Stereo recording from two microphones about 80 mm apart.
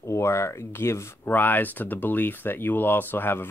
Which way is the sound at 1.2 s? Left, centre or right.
Left.